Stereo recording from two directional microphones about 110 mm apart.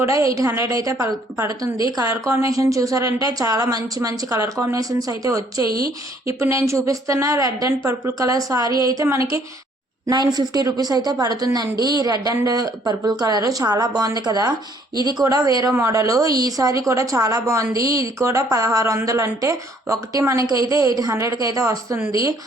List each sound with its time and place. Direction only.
0.0 s a woman's voice: 30° right (ahead or behind)